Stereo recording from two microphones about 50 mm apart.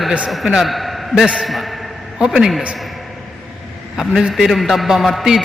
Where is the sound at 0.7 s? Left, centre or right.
Centre.